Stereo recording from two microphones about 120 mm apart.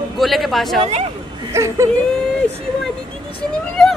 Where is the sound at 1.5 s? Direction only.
25° right (ahead or behind).